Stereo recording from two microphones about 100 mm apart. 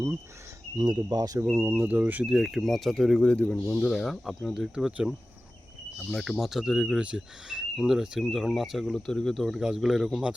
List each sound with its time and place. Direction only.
0.8 s speech: 45° right (ahead or behind)
1.5 s speech: 20° right (ahead or behind)
2.3 s speech: centre (ahead or behind)